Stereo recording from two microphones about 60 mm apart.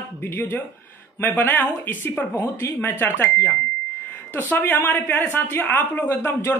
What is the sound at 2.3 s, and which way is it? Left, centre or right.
A woman's voice, left.